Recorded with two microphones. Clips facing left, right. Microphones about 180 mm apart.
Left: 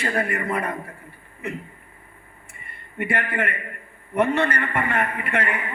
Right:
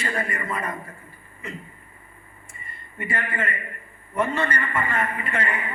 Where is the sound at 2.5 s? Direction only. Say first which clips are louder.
Left 3 dB; 65° left (ahead or behind).